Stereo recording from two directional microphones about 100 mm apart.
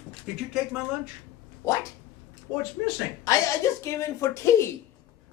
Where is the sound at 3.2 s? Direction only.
30° left (ahead or behind).